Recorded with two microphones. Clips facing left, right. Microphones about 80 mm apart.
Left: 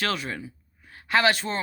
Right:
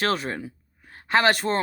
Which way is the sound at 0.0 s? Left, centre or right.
Right.